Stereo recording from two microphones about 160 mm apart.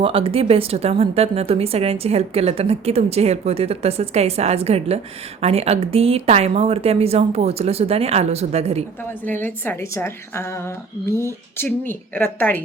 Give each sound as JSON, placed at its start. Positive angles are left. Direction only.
{"t": 0.0, "sound": "a woman's voice", "side_deg": -35}
{"t": 9.4, "sound": "a woman's voice", "side_deg": 15}